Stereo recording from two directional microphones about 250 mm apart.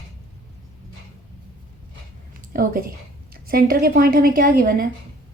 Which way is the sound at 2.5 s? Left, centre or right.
Right.